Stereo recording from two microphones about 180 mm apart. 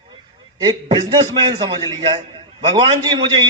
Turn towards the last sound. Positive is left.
turn(degrees=-25)  # may be behind; listen again after turning